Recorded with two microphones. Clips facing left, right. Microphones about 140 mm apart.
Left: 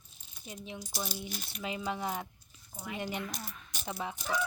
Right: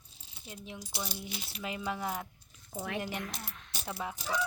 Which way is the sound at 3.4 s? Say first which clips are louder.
Left 1 dB; 80° right.